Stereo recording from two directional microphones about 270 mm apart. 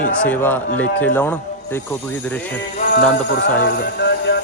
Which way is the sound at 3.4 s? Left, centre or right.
Left.